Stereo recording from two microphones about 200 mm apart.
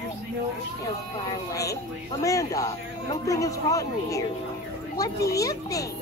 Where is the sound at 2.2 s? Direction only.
15° left (ahead or behind).